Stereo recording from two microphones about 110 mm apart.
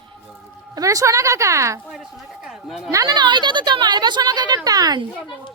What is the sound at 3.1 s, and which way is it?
Speech, 45° right (ahead or behind).